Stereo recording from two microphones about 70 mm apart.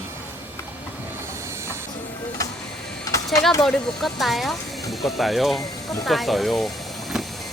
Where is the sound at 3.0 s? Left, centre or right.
Left.